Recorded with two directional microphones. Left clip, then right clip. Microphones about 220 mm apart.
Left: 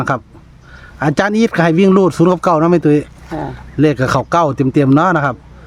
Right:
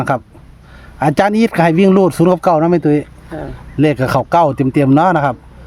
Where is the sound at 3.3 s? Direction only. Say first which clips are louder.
Left 3 dB; 45° left (ahead or behind).